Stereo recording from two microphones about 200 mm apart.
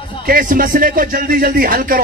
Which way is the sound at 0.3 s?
45° right (ahead or behind).